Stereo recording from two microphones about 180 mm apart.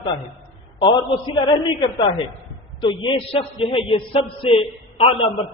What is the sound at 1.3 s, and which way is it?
A man's voice, 25° left (ahead or behind).